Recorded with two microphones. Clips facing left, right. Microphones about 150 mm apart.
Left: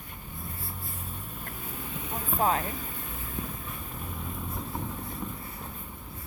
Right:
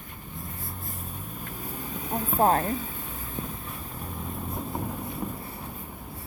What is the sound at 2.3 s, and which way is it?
Speech, 40° right (ahead or behind).